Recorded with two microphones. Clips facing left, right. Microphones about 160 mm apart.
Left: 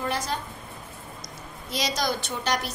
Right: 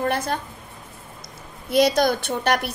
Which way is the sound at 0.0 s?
55° right (ahead or behind).